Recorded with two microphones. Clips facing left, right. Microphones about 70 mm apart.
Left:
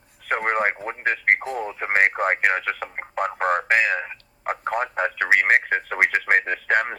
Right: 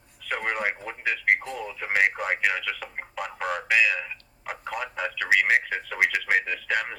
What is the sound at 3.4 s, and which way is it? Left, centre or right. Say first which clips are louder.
Radio: left 3 dB; left.